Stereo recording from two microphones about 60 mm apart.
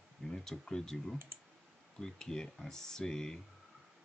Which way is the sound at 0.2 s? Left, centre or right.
Centre.